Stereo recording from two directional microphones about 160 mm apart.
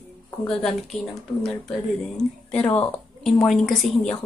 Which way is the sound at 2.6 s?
20° left (ahead or behind).